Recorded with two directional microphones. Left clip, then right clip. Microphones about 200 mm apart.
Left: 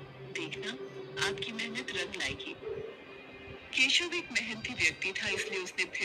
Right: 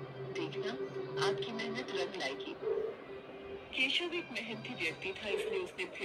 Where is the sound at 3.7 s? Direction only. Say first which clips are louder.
Left 6 dB; 35° left (ahead or behind).